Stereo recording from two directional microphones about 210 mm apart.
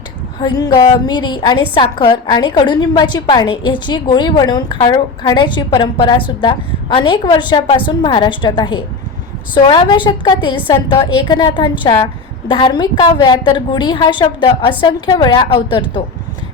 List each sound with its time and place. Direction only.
0.3 s a woman's voice: 20° left (ahead or behind)